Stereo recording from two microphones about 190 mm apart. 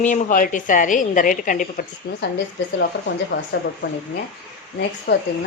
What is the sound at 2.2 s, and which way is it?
A woman's voice, 65° left (ahead or behind).